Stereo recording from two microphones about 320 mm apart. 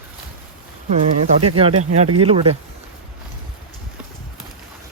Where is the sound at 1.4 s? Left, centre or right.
Centre.